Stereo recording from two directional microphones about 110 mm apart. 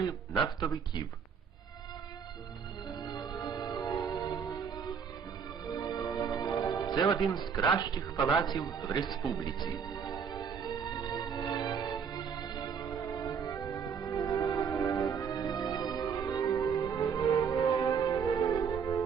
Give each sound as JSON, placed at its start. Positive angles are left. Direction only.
{"t": 0.4, "sound": "speech", "side_deg": 40}
{"t": 3.0, "sound": "music", "side_deg": 35}
{"t": 17.7, "sound": "church bell", "side_deg": 40}